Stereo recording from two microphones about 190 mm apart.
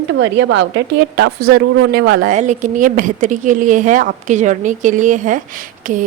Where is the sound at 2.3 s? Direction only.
40° right (ahead or behind).